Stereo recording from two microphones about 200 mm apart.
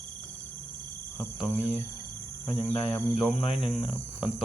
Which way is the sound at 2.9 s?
Centre (ahead or behind).